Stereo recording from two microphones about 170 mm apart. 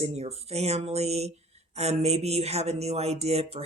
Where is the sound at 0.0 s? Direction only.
40° right (ahead or behind).